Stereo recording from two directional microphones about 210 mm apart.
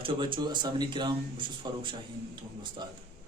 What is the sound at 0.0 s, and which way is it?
Speech, 25° right (ahead or behind).